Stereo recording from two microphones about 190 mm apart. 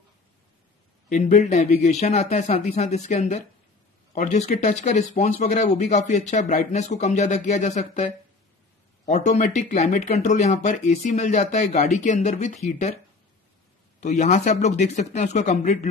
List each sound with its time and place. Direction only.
1.0 s speech: 40° left (ahead or behind)
14.0 s speech: 40° left (ahead or behind)